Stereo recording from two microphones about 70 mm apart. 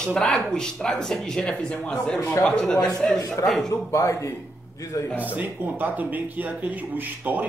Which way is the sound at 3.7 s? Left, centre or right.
Left.